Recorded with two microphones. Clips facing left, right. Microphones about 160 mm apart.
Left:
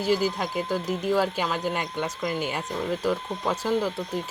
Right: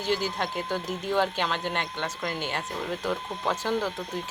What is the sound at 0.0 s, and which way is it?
Speech, 5° left (ahead or behind).